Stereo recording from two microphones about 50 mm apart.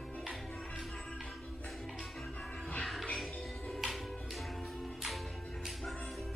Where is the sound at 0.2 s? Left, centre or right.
Centre.